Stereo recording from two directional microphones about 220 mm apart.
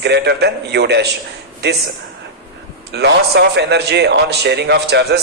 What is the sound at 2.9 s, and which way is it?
A man's voice, 50° right (ahead or behind).